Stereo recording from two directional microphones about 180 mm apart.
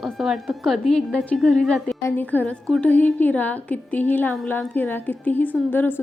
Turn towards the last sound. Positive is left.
turn(degrees=10)  # may be behind; listen again after turning